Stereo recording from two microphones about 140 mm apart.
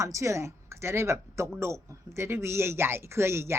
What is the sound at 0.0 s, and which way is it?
Speech, 20° right (ahead or behind).